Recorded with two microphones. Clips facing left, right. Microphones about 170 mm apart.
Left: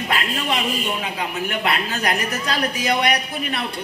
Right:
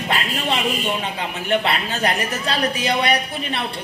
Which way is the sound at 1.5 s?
30° right (ahead or behind).